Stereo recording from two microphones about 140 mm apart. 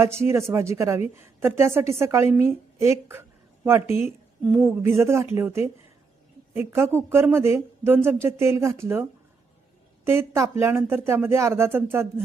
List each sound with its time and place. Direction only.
0.0 s a woman's voice: 20° right (ahead or behind)